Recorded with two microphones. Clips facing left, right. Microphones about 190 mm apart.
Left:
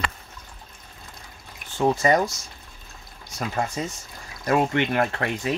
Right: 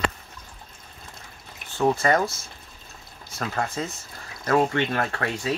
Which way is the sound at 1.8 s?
20° left (ahead or behind).